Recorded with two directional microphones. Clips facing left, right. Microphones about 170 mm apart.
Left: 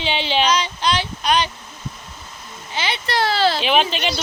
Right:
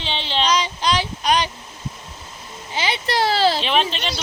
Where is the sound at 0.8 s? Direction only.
40° right (ahead or behind).